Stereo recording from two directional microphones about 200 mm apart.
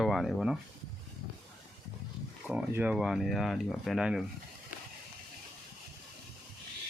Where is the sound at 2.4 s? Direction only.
10° right (ahead or behind).